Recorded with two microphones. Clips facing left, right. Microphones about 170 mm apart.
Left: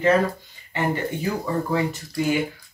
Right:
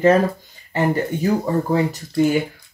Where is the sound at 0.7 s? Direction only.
40° right (ahead or behind).